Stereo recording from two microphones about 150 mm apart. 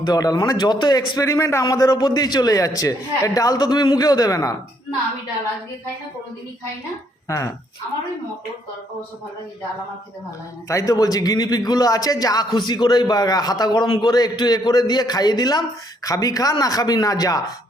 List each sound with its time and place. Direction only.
0.0 s a man's voice: 25° left (ahead or behind)
7.3 s speech: 20° left (ahead or behind)
10.7 s a man's voice: 20° left (ahead or behind)